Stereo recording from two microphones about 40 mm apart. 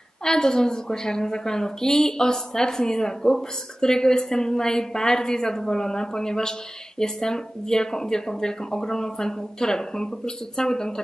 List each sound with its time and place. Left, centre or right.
0.2 s a woman's voice: centre